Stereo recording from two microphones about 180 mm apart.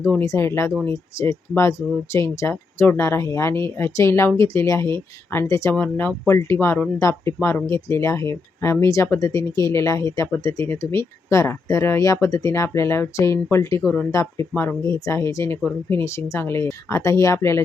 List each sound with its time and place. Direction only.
0.0 s speech: 15° left (ahead or behind)